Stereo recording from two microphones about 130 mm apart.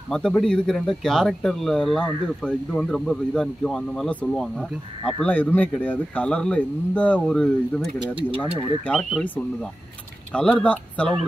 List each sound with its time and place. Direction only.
0.1 s speech: 5° left (ahead or behind)
8.1 s speech: 40° right (ahead or behind)
8.8 s speech: 5° left (ahead or behind)